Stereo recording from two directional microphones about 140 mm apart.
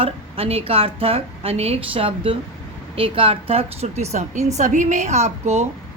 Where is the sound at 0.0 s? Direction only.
45° right (ahead or behind).